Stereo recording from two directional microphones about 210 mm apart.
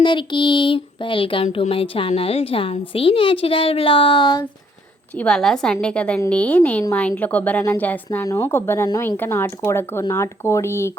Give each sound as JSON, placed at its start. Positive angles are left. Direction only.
{"t": 0.0, "sound": "a woman's voice", "side_deg": 20}
{"t": 5.1, "sound": "a woman's voice", "side_deg": 5}